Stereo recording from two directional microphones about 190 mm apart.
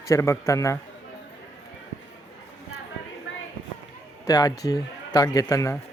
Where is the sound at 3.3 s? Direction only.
90° left.